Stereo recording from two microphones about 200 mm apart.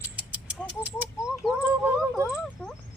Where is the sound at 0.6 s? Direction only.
10° left (ahead or behind).